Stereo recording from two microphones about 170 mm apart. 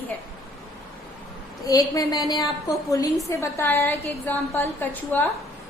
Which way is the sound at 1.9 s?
20° left (ahead or behind).